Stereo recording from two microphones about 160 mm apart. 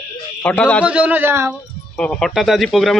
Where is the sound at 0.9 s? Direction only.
10° right (ahead or behind).